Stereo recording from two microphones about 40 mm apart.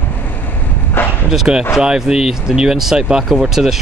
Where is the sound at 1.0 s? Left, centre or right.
Left.